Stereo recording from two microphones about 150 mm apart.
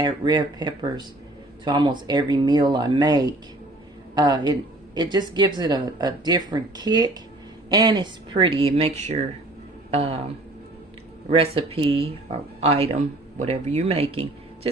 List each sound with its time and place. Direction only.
0.0 s speech: 30° right (ahead or behind)
11.3 s speech: 40° right (ahead or behind)